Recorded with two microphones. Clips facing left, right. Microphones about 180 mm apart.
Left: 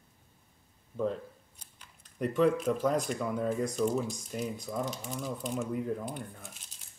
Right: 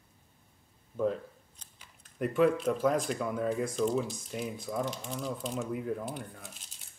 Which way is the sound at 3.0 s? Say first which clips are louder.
Even; centre (ahead or behind).